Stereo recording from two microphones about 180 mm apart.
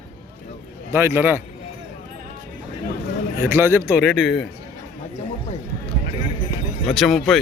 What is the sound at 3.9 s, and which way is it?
Speech, centre (ahead or behind).